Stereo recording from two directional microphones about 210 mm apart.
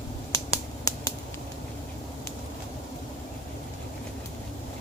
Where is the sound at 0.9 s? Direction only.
15° left (ahead or behind).